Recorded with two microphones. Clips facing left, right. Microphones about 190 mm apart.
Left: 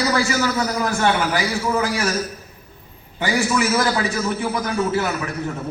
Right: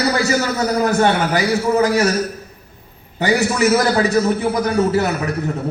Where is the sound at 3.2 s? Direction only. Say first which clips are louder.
Right 3 dB; 40° right (ahead or behind).